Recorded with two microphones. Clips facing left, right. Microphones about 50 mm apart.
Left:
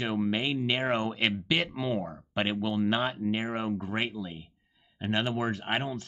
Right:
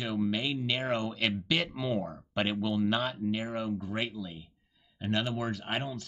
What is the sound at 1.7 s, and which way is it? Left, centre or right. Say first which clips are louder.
Speech: left 1 dB; centre.